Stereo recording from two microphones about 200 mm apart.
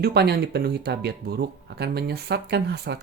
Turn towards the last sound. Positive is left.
turn(degrees=-55)  # may be behind; listen again after turning